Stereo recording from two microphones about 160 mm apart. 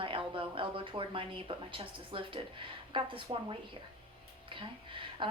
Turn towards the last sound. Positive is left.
turn(degrees=-30)  # may be behind; listen again after turning